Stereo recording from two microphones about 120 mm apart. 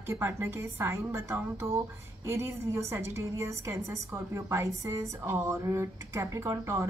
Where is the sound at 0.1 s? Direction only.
25° right (ahead or behind).